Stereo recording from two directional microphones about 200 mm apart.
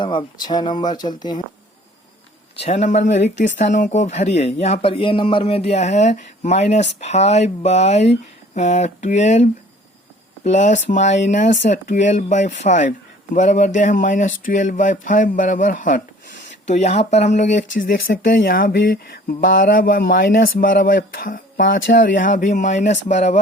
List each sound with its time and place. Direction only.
0.0 s speech: 25° left (ahead or behind)
2.6 s speech: 35° left (ahead or behind)